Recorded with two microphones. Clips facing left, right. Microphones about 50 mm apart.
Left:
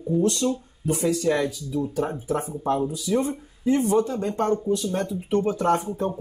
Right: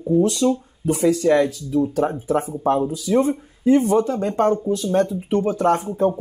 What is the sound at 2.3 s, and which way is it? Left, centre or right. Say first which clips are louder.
Speech: right 5 dB; right.